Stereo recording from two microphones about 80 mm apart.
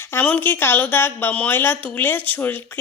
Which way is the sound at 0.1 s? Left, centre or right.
Left.